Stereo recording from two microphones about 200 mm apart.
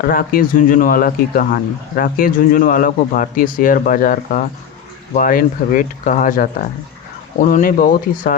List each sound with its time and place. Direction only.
0.0 s speech: 45° left (ahead or behind)